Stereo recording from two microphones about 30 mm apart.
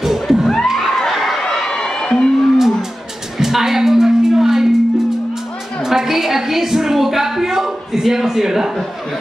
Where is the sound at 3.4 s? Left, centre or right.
Centre.